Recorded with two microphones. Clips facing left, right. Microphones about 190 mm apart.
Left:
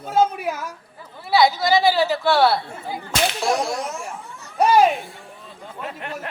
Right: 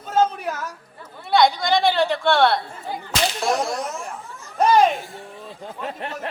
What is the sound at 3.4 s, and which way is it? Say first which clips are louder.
Whip: even; centre (ahead or behind).